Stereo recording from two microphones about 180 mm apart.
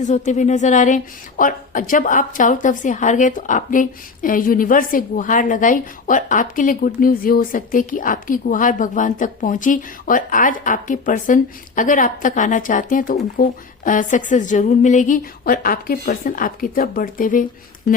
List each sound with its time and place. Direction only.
0.0 s a woman's voice: 40° left (ahead or behind)